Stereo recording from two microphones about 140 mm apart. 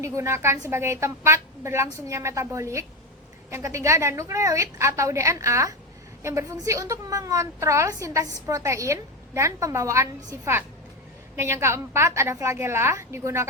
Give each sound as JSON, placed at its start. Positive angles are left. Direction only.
{"t": 0.0, "sound": "a woman's voice", "side_deg": -20}